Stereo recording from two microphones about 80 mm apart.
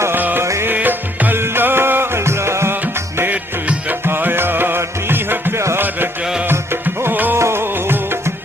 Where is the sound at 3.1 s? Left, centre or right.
Right.